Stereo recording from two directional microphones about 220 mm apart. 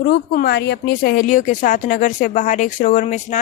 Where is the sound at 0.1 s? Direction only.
50° left (ahead or behind).